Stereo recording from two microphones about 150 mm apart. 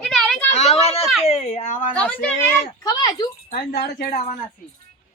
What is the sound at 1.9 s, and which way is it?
Speech, 10° left (ahead or behind).